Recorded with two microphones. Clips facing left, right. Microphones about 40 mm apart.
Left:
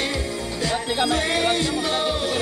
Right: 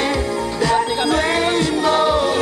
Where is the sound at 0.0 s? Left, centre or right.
Right.